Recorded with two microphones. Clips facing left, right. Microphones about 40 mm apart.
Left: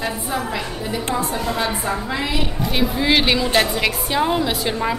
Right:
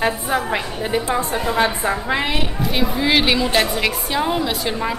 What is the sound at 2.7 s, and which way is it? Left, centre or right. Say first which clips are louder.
A woman's voice: even; centre.